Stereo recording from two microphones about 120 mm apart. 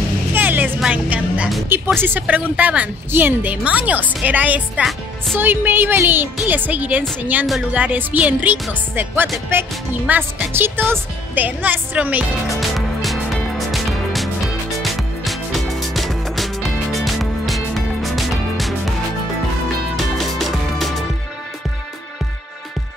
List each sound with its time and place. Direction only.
0.3 s vehicle: 15° right (ahead or behind)
0.7 s music: 10° right (ahead or behind)
2.0 s speech: 15° right (ahead or behind)
12.5 s music: centre (ahead or behind)
20.0 s music: centre (ahead or behind)